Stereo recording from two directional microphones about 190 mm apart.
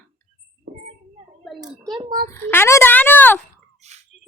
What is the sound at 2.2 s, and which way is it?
Speech, 10° left (ahead or behind).